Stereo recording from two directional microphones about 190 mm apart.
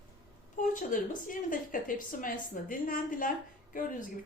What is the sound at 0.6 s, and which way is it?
A woman's voice, 45° left (ahead or behind).